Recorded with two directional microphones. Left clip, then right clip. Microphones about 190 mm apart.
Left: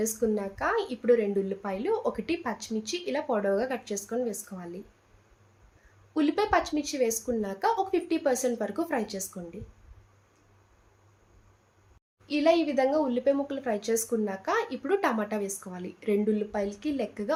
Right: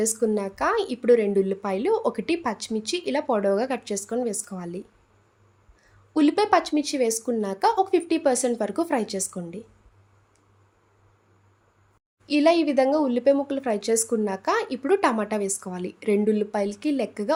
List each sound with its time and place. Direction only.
0.0 s speech: 55° right (ahead or behind)
6.1 s speech: 50° right (ahead or behind)
12.2 s speech: 55° right (ahead or behind)